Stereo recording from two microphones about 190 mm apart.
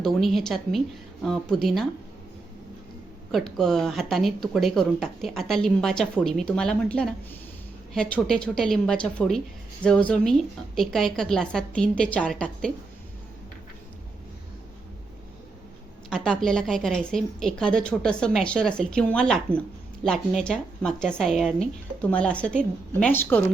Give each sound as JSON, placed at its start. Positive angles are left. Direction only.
{"t": 0.0, "sound": "speech", "side_deg": 0}
{"t": 3.3, "sound": "speech", "side_deg": 0}
{"t": 16.0, "sound": "speech", "side_deg": 5}
{"t": 20.4, "sound": "a woman's voice", "side_deg": 5}